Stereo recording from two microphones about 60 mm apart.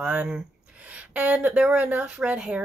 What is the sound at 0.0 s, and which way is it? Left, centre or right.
A woman's voice, centre.